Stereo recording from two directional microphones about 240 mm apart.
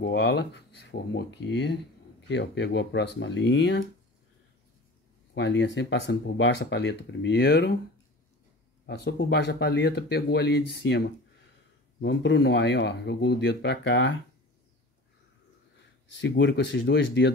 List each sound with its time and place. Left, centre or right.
0.0 s speech: left
5.3 s speech: left
8.8 s speech: left
16.2 s speech: left